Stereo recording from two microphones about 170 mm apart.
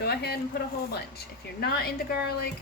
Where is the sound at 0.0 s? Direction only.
70° left (ahead or behind).